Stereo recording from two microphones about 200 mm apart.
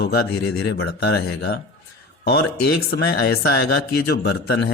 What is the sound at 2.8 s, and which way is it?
A man's voice, 55° left (ahead or behind).